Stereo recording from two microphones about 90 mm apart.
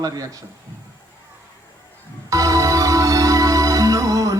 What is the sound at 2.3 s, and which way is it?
Music, 40° right (ahead or behind).